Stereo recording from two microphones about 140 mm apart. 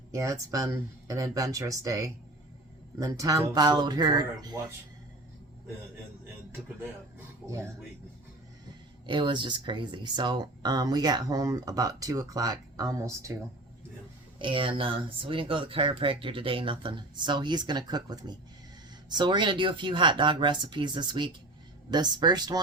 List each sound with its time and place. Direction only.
0.1 s speech: 20° right (ahead or behind)
7.4 s speech: 20° right (ahead or behind)
9.0 s speech: 35° right (ahead or behind)
14.3 s speech: 35° right (ahead or behind)